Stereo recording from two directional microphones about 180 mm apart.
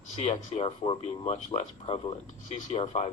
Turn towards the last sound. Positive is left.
turn(degrees=35)  # may be behind; listen again after turning